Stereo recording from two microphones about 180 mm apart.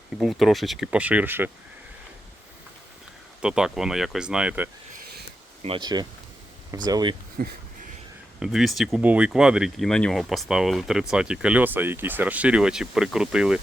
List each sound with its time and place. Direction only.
0.2 s speech: centre (ahead or behind)
3.4 s speech: 5° right (ahead or behind)
5.6 s speech: 25° right (ahead or behind)
7.4 s a sound: 60° right (ahead or behind)
8.4 s speech: centre (ahead or behind)